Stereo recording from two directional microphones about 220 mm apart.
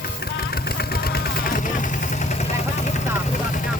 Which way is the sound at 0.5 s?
45° left (ahead or behind).